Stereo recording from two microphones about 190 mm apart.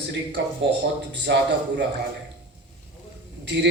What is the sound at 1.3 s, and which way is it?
Speech, 60° right (ahead or behind).